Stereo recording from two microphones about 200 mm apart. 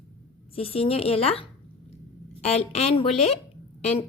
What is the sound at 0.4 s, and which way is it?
A woman's voice, 30° left (ahead or behind).